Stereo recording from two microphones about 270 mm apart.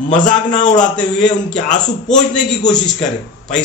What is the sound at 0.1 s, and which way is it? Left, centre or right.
Speech, left.